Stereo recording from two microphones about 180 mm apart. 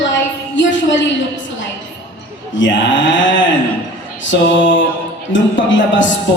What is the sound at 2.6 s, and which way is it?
Speech, 90° left.